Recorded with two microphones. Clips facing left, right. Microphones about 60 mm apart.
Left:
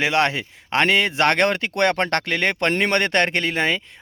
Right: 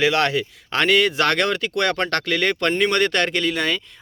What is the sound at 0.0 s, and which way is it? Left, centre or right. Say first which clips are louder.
Speech: right 1 dB; left.